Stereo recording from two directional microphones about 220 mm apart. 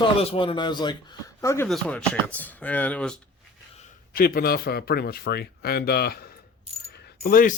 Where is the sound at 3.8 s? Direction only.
35° left (ahead or behind).